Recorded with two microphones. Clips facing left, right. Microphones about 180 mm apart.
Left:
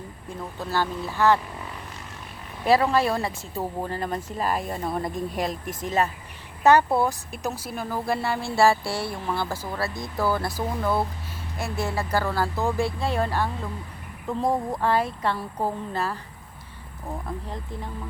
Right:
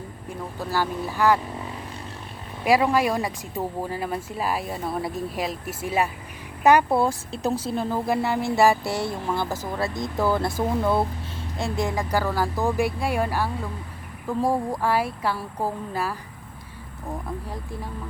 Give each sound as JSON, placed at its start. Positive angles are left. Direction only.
{"t": 0.7, "sound": "speech", "side_deg": -15}
{"t": 2.6, "sound": "speech", "side_deg": -10}
{"t": 6.9, "sound": "speech", "side_deg": -25}
{"t": 7.3, "sound": "speech", "side_deg": 15}
{"t": 7.6, "sound": "speech", "side_deg": -25}